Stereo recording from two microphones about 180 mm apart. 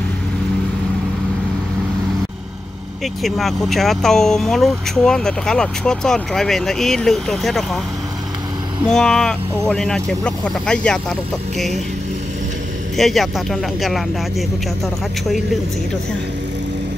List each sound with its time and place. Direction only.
3.2 s speech: centre (ahead or behind)
8.8 s speech: 5° left (ahead or behind)
12.9 s speech: centre (ahead or behind)
15.2 s speech: centre (ahead or behind)